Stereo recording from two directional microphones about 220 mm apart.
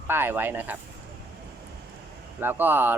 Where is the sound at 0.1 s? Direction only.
10° right (ahead or behind).